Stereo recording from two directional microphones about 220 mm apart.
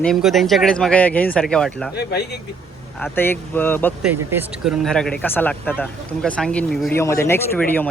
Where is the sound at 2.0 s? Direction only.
50° left (ahead or behind).